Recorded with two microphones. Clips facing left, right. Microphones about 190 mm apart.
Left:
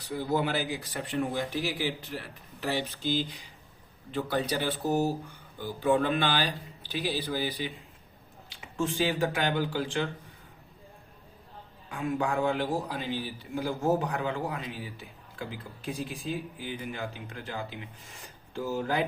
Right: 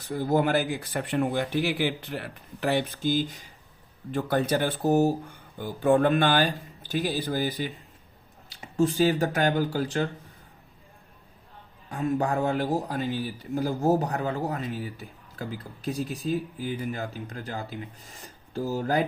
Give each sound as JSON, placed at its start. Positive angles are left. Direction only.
{"t": 0.0, "sound": "speech", "side_deg": -50}
{"t": 11.9, "sound": "speech", "side_deg": -40}